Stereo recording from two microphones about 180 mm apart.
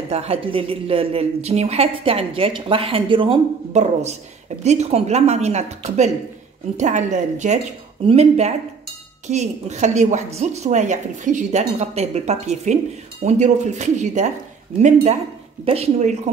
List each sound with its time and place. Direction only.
0.1 s a woman's voice: 35° right (ahead or behind)